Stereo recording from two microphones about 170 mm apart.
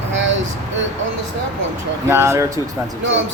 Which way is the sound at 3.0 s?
90° right.